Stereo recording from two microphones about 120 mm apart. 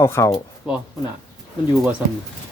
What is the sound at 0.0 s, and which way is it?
Speech, 20° left (ahead or behind).